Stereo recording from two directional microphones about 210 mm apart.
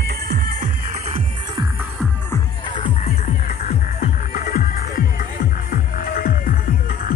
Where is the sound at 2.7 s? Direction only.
25° left (ahead or behind).